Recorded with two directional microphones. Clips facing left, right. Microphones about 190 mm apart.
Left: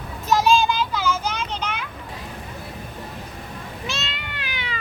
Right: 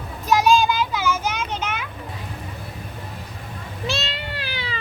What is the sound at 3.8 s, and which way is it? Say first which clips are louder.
Cat: right 7 dB; 35° right (ahead or behind).